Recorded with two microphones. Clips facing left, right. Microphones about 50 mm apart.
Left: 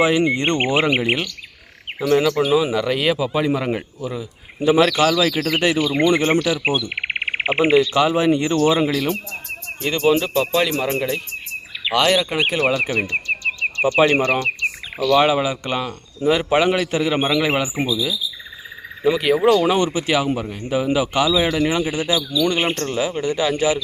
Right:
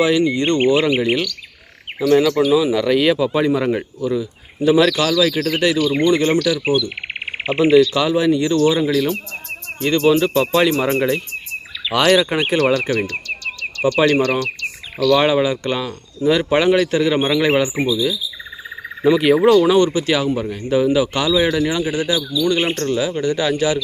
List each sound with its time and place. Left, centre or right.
0.0 s speech: left
2.8 s speech: centre
4.0 s speech: centre
8.9 s speech: centre
12.7 s speech: centre
13.1 s bird: left
15.1 s speech: centre
19.5 s speech: centre
21.7 s speech: left
22.6 s speech: centre
22.9 s speech: centre